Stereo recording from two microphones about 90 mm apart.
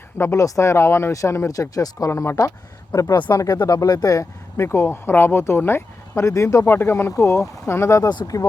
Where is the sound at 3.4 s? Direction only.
45° left (ahead or behind).